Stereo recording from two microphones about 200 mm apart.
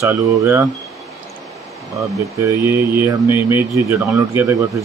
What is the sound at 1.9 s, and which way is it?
Speech, 15° right (ahead or behind).